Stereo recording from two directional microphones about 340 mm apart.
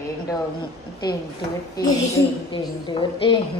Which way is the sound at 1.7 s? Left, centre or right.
Centre.